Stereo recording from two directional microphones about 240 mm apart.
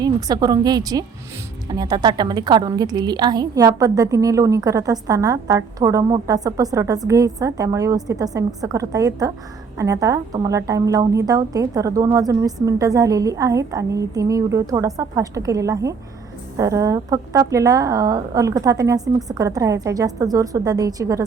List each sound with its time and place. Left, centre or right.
0.0 s a woman's voice: centre